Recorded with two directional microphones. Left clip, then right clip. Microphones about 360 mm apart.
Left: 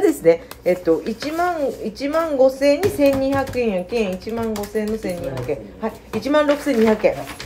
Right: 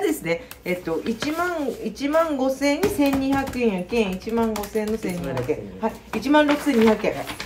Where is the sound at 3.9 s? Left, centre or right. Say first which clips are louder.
Even; centre.